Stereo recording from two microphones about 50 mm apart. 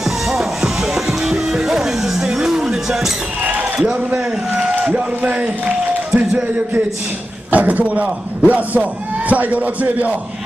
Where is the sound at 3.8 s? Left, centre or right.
Right.